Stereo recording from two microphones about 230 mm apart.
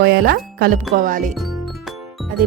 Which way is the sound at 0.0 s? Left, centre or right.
Right.